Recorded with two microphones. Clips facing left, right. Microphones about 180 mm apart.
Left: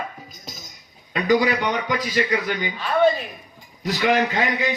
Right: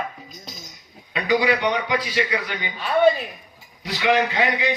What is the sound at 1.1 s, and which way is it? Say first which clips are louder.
A man's voice: left 1 dB; 45° left (ahead or behind).